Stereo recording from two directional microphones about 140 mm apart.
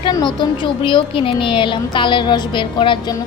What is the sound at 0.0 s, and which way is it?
A woman's voice, 35° left (ahead or behind).